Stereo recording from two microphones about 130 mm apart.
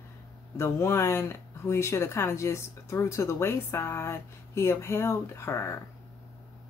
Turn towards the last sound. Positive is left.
turn(degrees=20)  # may be behind; listen again after turning